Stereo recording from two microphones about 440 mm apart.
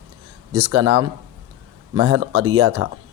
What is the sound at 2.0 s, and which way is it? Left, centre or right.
Speech, right.